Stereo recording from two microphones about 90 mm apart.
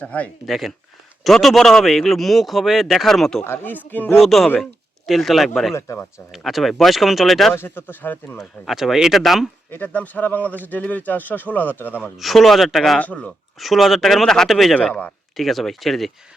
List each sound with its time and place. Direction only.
0.0 s speech: 15° left (ahead or behind)
0.4 s a man's voice: centre (ahead or behind)
3.4 s speech: 25° left (ahead or behind)
4.1 s a man's voice: centre (ahead or behind)
5.7 s speech: 30° left (ahead or behind)
6.1 s a man's voice: centre (ahead or behind)
7.5 s speech: 25° left (ahead or behind)
8.4 s a man's voice: 5° right (ahead or behind)
9.7 s speech: 20° left (ahead or behind)
12.1 s a man's voice: centre (ahead or behind)
13.0 s speech: 15° left (ahead or behind)
13.6 s a man's voice: centre (ahead or behind)
14.8 s speech: 10° left (ahead or behind)
15.4 s a man's voice: centre (ahead or behind)